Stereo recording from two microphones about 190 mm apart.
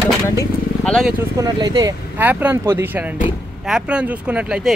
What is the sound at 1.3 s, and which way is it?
Speech, 20° right (ahead or behind).